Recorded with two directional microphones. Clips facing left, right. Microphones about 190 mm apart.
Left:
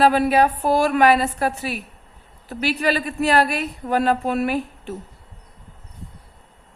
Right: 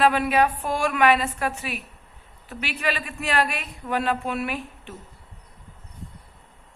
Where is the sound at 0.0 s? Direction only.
35° left (ahead or behind).